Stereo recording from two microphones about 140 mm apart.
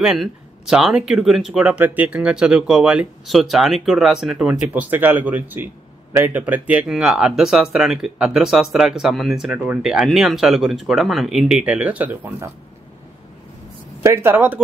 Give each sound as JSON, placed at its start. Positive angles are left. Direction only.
{"t": 0.0, "sound": "speech", "side_deg": -5}
{"t": 14.0, "sound": "a woman's voice", "side_deg": -20}